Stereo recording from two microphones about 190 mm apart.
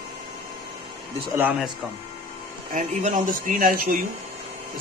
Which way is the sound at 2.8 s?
40° right (ahead or behind).